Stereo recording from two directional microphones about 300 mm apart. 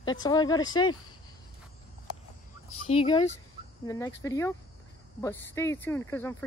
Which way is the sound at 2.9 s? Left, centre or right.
Centre.